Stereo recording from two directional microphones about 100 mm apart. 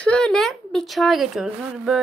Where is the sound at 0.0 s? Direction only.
10° left (ahead or behind).